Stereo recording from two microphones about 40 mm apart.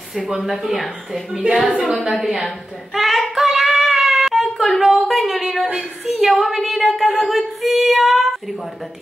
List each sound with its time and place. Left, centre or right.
0.1 s speech: centre
1.3 s a woman's voice: right
2.0 s child singing: centre
6.0 s a sound: centre